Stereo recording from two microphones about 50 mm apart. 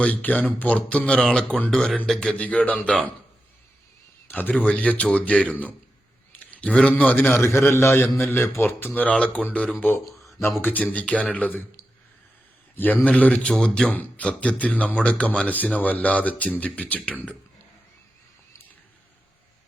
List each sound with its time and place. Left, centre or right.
0.0 s a man's voice: left; by 2.2 s centre
2.4 s speech: left
4.3 s a man's voice: left
4.6 s speech: left
7.4 s a man's voice: left
8.0 s a man's voice: left
8.9 s speech: left
9.7 s a man's voice: left
10.6 s speech: left
12.7 s a man's voice: left
13.5 s a man's voice: centre
13.9 s speech: left